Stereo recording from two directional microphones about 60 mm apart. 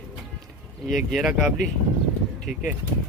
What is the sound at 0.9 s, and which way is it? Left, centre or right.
Speech, centre.